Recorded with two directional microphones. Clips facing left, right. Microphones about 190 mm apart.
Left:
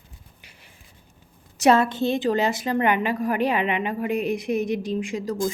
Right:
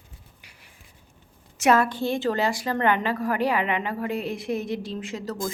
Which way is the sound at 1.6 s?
25° left (ahead or behind).